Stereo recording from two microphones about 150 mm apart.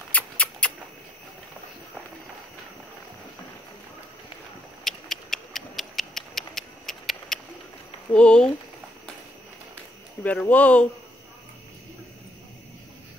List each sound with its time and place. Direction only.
0.1 s mouse: 10° left (ahead or behind)
4.8 s a sound: 5° left (ahead or behind)
8.1 s speech: 5° left (ahead or behind)
10.2 s speech: 10° left (ahead or behind)